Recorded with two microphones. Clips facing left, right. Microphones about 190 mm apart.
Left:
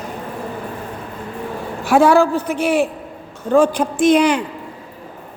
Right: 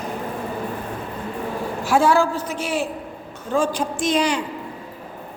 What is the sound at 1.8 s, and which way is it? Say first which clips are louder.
A woman's voice: left 5 dB; 60° left (ahead or behind).